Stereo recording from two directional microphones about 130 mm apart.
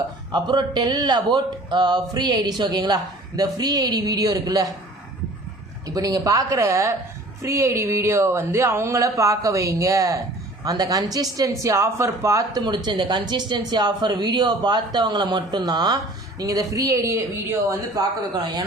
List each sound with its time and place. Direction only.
0.3 s speech: 35° right (ahead or behind)
5.9 s speech: 25° right (ahead or behind)